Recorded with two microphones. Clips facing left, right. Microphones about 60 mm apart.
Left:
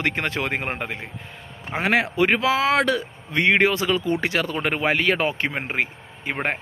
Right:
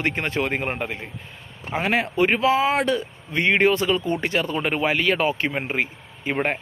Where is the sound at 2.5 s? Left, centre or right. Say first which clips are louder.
Even; left.